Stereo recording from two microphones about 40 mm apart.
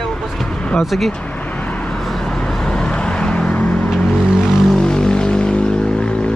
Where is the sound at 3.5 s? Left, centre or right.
Left.